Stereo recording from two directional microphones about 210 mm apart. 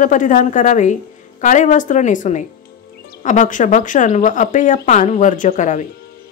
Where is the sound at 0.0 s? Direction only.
40° left (ahead or behind).